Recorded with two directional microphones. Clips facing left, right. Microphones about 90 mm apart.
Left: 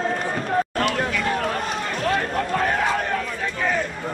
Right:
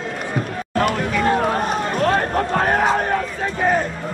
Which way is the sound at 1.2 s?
35° right (ahead or behind).